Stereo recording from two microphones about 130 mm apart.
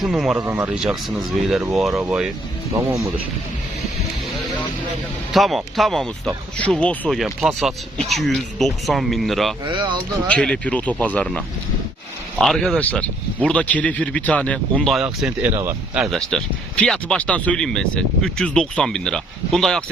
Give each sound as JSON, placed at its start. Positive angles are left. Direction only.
{"t": 0.0, "sound": "speech", "side_deg": -5}
{"t": 0.4, "sound": "speech", "side_deg": -20}
{"t": 0.7, "sound": "speech", "side_deg": -5}
{"t": 5.3, "sound": "speech", "side_deg": 0}
{"t": 7.2, "sound": "speech", "side_deg": 0}
{"t": 9.6, "sound": "speech", "side_deg": -40}
{"t": 10.2, "sound": "a man's voice", "side_deg": 10}
{"t": 16.0, "sound": "speech", "side_deg": 0}